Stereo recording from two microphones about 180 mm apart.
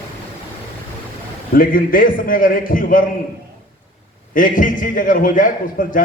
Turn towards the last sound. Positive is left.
turn(degrees=50)  # may be behind; listen again after turning